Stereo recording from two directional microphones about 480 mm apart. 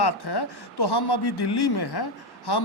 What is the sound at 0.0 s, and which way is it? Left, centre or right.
A man's voice, left.